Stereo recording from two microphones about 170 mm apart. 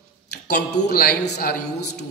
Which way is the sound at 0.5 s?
80° left.